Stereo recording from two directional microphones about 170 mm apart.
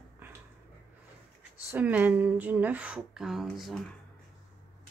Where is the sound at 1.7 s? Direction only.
10° right (ahead or behind).